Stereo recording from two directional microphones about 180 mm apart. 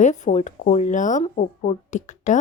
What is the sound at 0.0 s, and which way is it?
Speech, 40° left (ahead or behind).